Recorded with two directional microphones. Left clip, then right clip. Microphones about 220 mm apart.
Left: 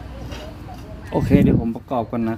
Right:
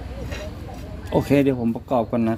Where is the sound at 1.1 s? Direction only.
5° right (ahead or behind).